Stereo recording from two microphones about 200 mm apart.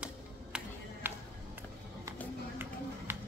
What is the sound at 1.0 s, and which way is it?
Music, 10° right (ahead or behind).